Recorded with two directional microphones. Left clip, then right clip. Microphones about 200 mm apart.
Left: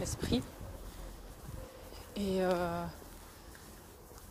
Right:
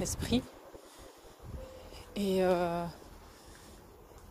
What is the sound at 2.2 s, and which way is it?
Speech, 60° right (ahead or behind).